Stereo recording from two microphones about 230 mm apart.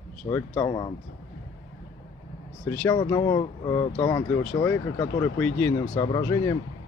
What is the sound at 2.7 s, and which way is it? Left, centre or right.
Speech, centre.